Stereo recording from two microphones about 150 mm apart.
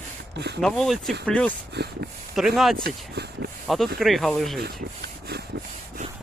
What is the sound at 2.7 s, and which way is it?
Speech, 90° right.